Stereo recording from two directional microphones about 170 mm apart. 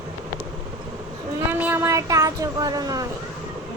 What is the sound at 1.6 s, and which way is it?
A woman's voice, 15° right (ahead or behind).